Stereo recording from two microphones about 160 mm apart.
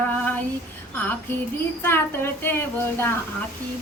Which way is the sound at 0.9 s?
10° left (ahead or behind).